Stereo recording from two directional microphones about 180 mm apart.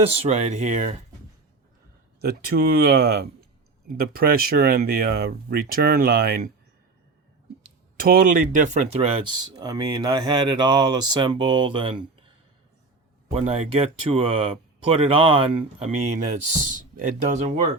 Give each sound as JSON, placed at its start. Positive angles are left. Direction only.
{"t": 0.2, "sound": "speech", "side_deg": -40}
{"t": 2.2, "sound": "speech", "side_deg": -55}
{"t": 7.9, "sound": "speech", "side_deg": -55}
{"t": 9.6, "sound": "speech", "side_deg": -20}
{"t": 13.3, "sound": "speech", "side_deg": -35}
{"t": 17.0, "sound": "speech", "side_deg": -40}